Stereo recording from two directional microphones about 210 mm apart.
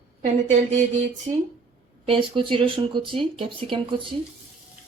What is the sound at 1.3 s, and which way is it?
Speech, 20° right (ahead or behind).